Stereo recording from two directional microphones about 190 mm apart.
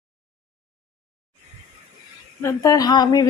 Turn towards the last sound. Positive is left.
turn(degrees=20)  # may be behind; listen again after turning